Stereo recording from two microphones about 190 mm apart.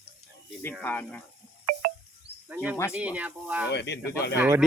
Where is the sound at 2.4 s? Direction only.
10° right (ahead or behind).